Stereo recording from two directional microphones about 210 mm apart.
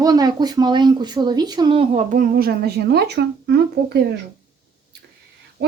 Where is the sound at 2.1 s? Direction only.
45° right (ahead or behind).